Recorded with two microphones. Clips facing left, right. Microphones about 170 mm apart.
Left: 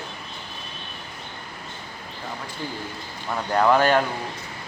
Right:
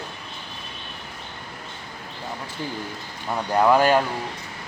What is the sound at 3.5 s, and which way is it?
Speech, 10° right (ahead or behind).